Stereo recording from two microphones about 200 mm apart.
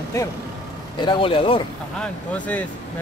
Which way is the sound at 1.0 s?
25° left (ahead or behind).